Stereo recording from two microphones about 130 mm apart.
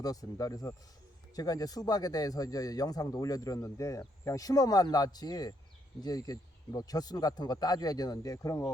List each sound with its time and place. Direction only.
0.0 s a man's voice: 30° left (ahead or behind)